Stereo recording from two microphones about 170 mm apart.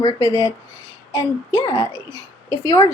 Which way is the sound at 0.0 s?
30° left (ahead or behind).